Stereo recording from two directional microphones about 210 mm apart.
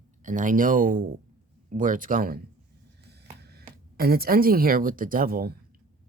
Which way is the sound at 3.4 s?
50° right (ahead or behind).